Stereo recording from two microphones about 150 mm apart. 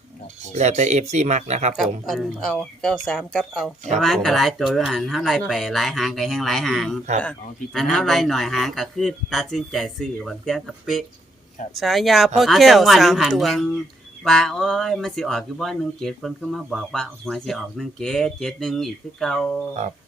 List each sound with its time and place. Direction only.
0.5 s speech: 50° right (ahead or behind)
1.7 s speech: centre (ahead or behind)